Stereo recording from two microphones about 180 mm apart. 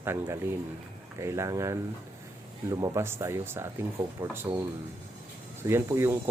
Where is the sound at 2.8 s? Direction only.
15° right (ahead or behind).